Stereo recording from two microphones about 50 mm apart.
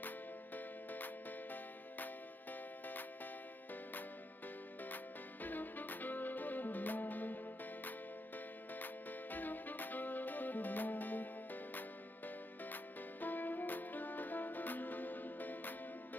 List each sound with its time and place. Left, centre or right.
0.6 s music: left
4.8 s music: left
8.7 s music: left
13.2 s music: left